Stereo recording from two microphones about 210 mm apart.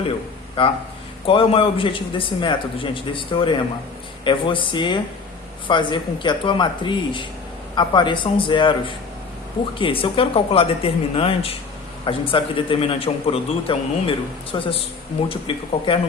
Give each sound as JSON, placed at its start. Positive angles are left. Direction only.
{"t": 0.6, "sound": "a man's voice", "side_deg": 25}